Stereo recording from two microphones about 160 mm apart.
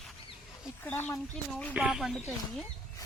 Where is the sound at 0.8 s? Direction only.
10° left (ahead or behind).